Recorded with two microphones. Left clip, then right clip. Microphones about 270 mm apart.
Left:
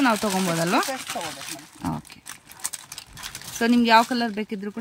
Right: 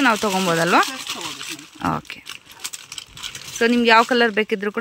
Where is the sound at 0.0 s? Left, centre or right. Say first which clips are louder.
Right 4 dB; centre.